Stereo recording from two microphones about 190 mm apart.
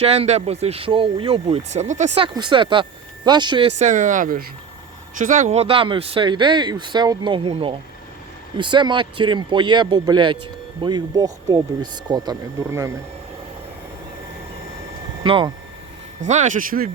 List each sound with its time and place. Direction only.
0.0 s speech: 35° right (ahead or behind)
3.8 s speech: 40° right (ahead or behind); by 12.9 s 20° right (ahead or behind)
15.2 s speech: 25° right (ahead or behind)
16.2 s speech: 40° right (ahead or behind)